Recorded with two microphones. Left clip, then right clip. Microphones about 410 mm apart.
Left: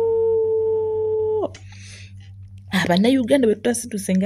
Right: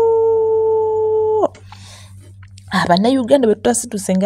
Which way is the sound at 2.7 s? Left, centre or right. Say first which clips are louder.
Right 4 dB; left.